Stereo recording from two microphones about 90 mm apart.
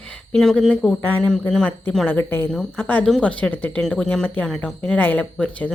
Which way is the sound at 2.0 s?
20° left (ahead or behind).